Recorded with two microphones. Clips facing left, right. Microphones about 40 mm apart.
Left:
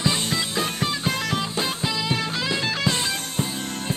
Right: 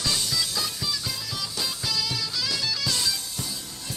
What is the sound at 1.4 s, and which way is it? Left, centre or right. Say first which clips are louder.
Music: left 6 dB; left.